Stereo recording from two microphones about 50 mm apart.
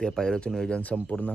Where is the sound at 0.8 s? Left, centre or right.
Left.